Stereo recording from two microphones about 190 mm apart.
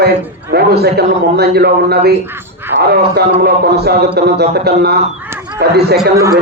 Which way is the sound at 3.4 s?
60° right (ahead or behind).